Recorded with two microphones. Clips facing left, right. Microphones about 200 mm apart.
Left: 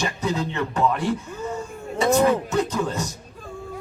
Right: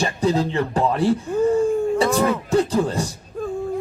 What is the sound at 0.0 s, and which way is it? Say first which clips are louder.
Speech: right 5 dB; 35° right (ahead or behind).